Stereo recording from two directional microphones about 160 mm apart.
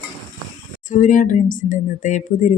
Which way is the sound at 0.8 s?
55° left (ahead or behind).